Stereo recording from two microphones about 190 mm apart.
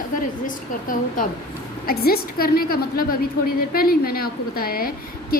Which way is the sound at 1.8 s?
55° left (ahead or behind).